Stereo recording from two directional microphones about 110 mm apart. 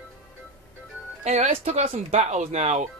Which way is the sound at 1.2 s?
90° right.